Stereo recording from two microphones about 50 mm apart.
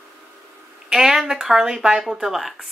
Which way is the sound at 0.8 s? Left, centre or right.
Centre.